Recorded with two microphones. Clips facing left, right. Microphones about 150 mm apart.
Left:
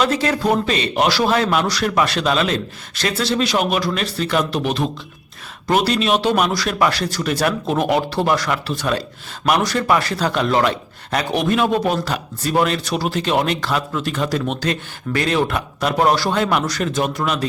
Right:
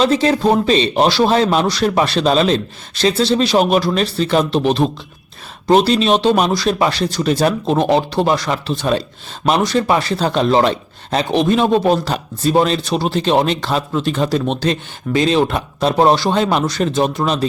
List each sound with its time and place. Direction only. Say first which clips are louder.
0.0 s a man's voice: right 4 dB; 25° right (ahead or behind)